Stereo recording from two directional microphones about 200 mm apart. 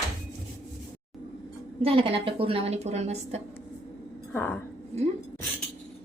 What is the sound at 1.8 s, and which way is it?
A woman's voice, 30° right (ahead or behind).